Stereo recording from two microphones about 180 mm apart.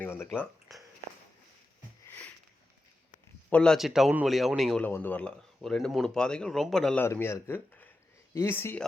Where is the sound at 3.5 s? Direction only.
5° left (ahead or behind).